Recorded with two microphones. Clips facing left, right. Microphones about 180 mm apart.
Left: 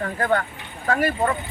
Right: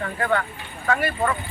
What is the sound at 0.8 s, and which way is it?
Speech, 35° left (ahead or behind).